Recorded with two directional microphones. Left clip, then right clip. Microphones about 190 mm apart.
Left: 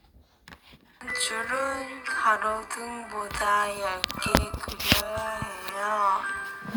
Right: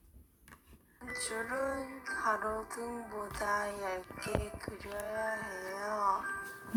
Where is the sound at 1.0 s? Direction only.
20° left (ahead or behind).